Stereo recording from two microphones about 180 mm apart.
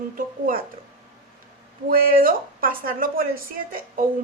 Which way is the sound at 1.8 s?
55° right (ahead or behind).